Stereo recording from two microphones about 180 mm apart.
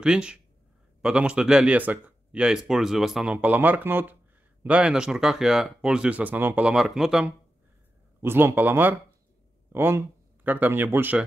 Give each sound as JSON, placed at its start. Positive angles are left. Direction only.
{"t": 0.0, "sound": "speech", "side_deg": -5}